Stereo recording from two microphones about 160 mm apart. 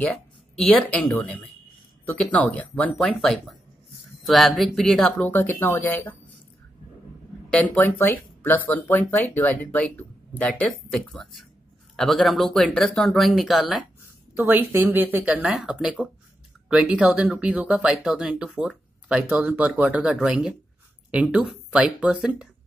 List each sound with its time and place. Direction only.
0.6 s speech: 5° left (ahead or behind)
1.0 s speech: 15° left (ahead or behind)
7.4 s speech: 10° left (ahead or behind)
14.3 s speech: 15° right (ahead or behind)